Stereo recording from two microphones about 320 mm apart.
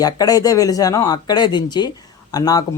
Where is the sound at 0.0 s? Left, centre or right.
Centre.